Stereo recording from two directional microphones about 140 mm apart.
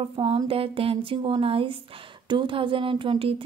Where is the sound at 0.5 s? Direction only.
40° right (ahead or behind).